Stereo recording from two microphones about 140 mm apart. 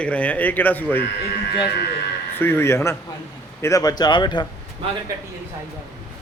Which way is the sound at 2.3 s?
15° left (ahead or behind).